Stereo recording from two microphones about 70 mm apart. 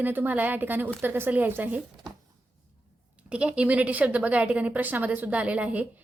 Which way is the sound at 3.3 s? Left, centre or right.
Centre.